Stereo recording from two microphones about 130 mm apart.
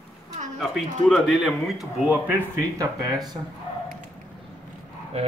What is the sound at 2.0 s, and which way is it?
Speech, 15° right (ahead or behind).